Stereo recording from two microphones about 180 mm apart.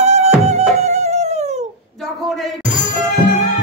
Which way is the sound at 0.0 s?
35° right (ahead or behind).